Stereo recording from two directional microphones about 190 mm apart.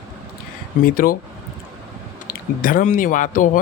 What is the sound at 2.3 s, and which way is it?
Speech, 50° left (ahead or behind).